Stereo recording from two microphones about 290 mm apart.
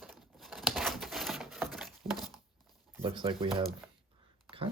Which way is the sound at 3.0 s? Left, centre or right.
Centre.